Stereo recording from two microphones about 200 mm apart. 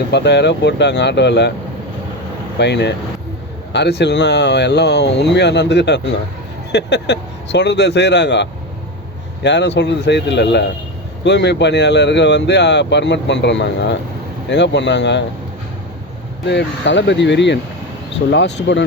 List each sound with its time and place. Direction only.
0.1 s speech: 60° left (ahead or behind)
2.6 s speech: 60° left (ahead or behind)
16.5 s speech: 60° left (ahead or behind)